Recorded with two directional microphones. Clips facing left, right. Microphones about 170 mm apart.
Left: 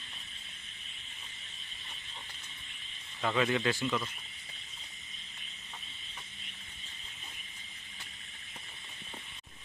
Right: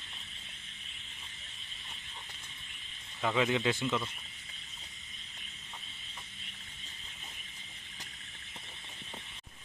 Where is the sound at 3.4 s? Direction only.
15° right (ahead or behind).